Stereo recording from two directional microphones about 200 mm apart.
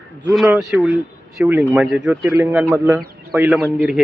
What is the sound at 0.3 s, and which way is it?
Speech, 5° right (ahead or behind).